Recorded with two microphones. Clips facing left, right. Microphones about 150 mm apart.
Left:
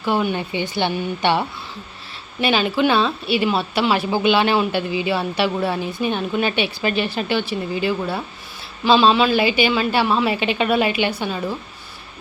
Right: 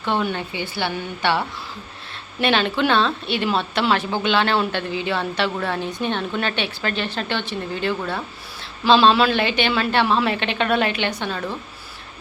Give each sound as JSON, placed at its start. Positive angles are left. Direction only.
{"t": 0.0, "sound": "a woman's voice", "side_deg": 5}
{"t": 0.5, "sound": "a woman's voice", "side_deg": 20}
{"t": 2.4, "sound": "a woman's voice", "side_deg": 5}